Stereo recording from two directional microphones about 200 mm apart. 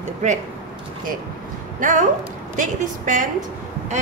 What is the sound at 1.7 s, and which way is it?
A woman's voice, 40° right (ahead or behind).